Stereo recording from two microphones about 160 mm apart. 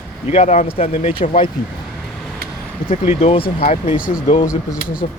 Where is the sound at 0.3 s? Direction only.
40° left (ahead or behind).